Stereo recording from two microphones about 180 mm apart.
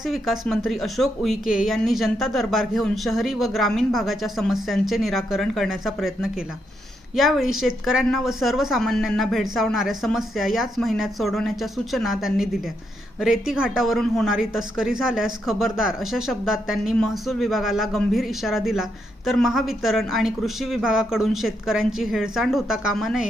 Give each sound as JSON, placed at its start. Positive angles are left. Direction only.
{"t": 0.0, "sound": "speech", "side_deg": 0}